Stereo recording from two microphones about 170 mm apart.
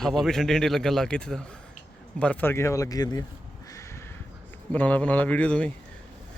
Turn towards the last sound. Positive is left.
turn(degrees=10)  # may be behind; listen again after turning